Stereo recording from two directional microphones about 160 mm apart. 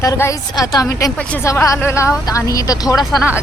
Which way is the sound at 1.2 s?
10° left (ahead or behind).